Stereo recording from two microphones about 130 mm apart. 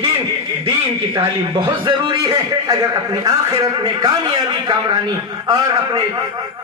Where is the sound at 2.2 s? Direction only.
25° right (ahead or behind).